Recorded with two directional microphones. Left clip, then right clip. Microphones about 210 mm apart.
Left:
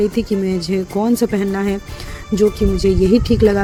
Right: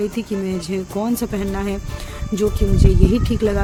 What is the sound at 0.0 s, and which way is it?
Speech, 20° left (ahead or behind).